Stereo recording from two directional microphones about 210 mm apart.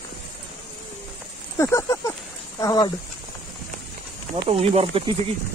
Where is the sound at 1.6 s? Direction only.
15° left (ahead or behind).